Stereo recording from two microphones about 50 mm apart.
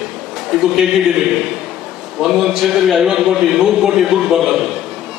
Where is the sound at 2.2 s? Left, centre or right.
Centre.